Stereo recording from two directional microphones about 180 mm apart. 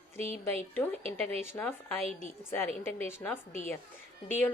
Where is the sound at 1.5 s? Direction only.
10° left (ahead or behind).